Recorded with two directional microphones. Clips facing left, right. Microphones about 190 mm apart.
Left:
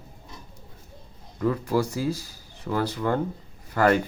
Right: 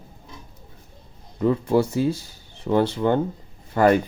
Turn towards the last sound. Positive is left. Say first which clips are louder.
# right 3 dB
turn(degrees=-20)  # may be behind; listen again after turning